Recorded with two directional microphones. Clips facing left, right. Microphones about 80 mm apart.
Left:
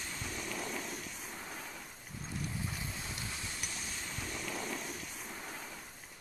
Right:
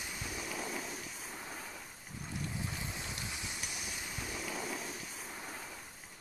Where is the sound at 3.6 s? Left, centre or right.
Centre.